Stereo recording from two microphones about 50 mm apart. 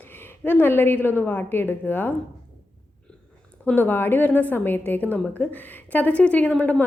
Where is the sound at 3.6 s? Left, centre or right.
Left.